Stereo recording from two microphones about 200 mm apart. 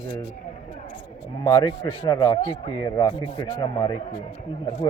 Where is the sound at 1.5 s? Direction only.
15° left (ahead or behind).